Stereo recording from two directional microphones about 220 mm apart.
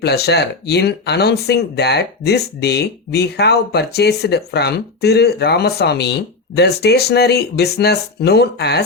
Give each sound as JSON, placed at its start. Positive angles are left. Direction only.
{"t": 0.0, "sound": "speech", "side_deg": 45}